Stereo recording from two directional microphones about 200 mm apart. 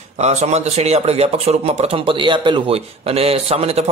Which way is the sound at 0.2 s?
35° right (ahead or behind).